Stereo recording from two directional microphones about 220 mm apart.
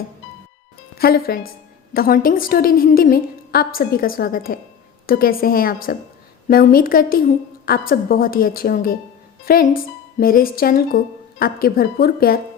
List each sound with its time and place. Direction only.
0.9 s a woman's voice: 45° left (ahead or behind)